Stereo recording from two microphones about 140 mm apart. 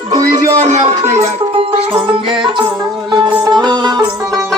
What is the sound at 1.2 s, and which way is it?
Music, 50° right (ahead or behind).